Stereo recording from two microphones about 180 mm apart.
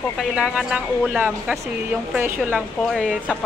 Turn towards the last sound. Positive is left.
turn(degrees=5)  # may be behind; listen again after turning